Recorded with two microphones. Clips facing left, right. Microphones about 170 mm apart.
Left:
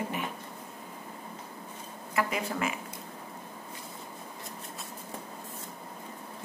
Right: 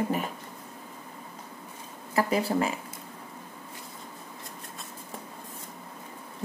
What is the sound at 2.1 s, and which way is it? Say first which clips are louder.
Speech: right 6 dB; 35° right (ahead or behind).